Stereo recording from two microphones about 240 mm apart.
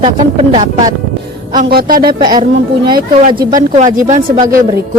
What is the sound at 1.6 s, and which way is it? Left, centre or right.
Speech, right.